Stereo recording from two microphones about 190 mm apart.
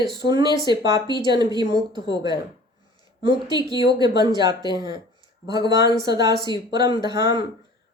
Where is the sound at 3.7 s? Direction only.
20° right (ahead or behind).